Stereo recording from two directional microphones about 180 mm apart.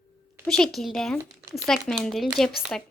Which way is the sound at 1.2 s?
15° right (ahead or behind).